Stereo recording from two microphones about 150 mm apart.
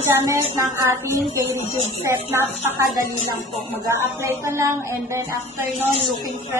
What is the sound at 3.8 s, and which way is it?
Speech, 20° right (ahead or behind).